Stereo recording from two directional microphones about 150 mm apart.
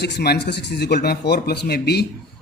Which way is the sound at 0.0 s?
90° left.